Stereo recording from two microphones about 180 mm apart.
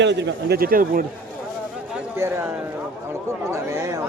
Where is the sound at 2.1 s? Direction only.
15° right (ahead or behind).